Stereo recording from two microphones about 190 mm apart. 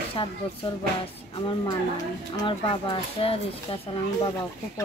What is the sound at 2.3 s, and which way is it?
Speech, 25° left (ahead or behind).